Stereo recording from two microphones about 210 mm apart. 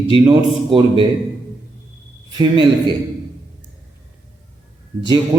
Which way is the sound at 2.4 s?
20° right (ahead or behind).